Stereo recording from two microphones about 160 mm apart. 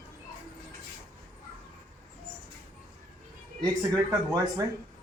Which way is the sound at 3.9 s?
20° right (ahead or behind).